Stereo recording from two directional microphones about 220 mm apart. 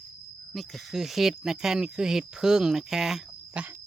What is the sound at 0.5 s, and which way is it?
Speech, centre (ahead or behind).